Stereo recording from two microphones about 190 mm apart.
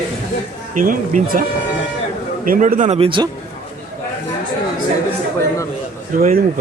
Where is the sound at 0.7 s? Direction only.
45° right (ahead or behind).